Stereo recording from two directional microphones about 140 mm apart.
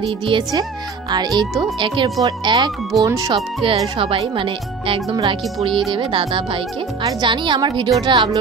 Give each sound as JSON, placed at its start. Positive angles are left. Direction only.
{"t": 0.0, "sound": "speech", "side_deg": -40}
{"t": 0.4, "sound": "speech", "side_deg": -30}
{"t": 1.3, "sound": "speech", "side_deg": 0}
{"t": 1.6, "sound": "speech", "side_deg": -35}
{"t": 3.6, "sound": "speech", "side_deg": -40}